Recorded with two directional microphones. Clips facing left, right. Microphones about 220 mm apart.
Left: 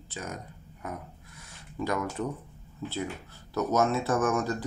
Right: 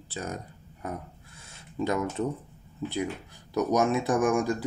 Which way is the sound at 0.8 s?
25° right (ahead or behind).